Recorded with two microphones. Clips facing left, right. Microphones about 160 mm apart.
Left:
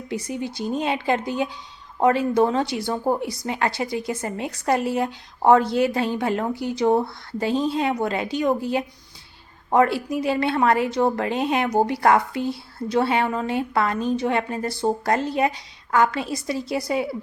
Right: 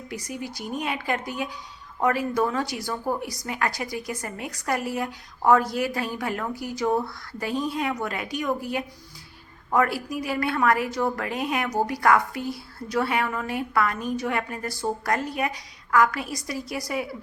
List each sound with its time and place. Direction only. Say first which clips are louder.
0.1 s a woman's voice: left 6 dB; 25° left (ahead or behind)